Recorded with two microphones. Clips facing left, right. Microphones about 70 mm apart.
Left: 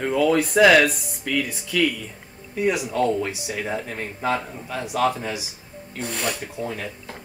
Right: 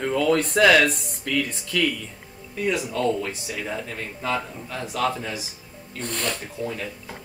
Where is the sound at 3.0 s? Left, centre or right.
Left.